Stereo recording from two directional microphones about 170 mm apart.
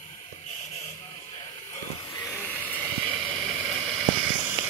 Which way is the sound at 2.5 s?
10° left (ahead or behind).